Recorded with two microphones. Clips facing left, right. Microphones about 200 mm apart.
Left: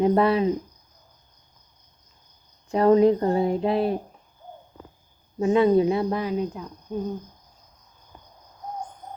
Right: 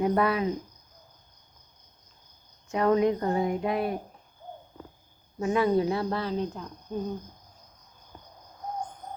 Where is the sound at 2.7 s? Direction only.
30° left (ahead or behind).